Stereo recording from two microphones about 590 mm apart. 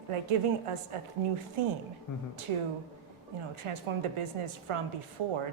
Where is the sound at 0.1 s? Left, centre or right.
Right.